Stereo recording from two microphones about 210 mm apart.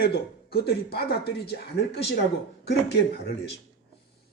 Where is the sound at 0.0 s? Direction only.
50° left (ahead or behind).